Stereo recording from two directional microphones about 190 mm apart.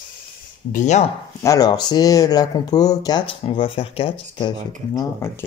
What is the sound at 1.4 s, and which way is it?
Speech, 15° left (ahead or behind).